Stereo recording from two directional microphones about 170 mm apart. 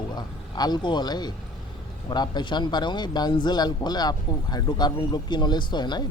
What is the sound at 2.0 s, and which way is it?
Speech, 25° left (ahead or behind).